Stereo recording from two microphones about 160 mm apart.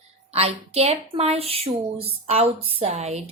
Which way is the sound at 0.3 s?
40° right (ahead or behind).